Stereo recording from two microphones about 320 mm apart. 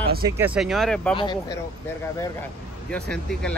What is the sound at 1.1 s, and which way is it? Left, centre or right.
Speech, centre.